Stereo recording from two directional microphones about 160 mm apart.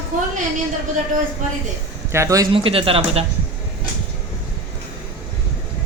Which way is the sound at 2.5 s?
35° right (ahead or behind).